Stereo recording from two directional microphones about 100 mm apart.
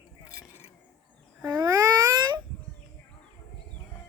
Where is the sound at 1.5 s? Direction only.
45° right (ahead or behind).